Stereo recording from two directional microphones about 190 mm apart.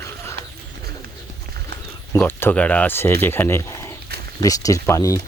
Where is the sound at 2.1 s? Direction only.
10° left (ahead or behind).